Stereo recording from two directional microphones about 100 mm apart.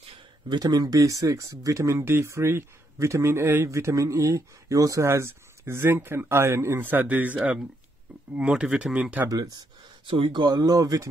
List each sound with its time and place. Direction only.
0.5 s speech: 40° right (ahead or behind); by 7.3 s 15° right (ahead or behind)
8.4 s speech: 10° right (ahead or behind)
9.3 s speech: 40° right (ahead or behind)
10.1 s speech: 55° right (ahead or behind); by 11.1 s 35° right (ahead or behind)